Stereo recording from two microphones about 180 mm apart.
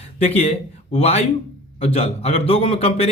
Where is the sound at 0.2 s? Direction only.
35° left (ahead or behind).